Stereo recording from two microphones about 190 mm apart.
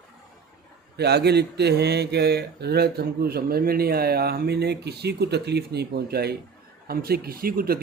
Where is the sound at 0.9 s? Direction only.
60° right (ahead or behind).